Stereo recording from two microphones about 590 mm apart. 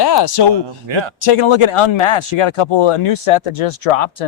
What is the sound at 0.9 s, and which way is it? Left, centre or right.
Speech, right.